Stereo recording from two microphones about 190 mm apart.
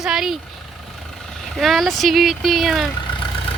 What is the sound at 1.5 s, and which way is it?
Speech, centre (ahead or behind).